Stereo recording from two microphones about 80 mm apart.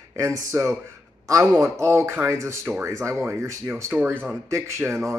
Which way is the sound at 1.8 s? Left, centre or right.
Right.